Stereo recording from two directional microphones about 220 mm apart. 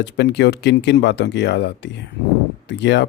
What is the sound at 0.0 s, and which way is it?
Speech, 50° left (ahead or behind).